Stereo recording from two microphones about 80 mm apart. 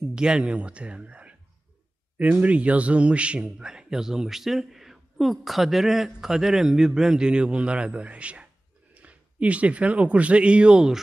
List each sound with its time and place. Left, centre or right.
0.1 s a man's voice: centre